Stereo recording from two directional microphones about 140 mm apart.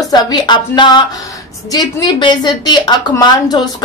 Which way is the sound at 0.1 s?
30° left (ahead or behind).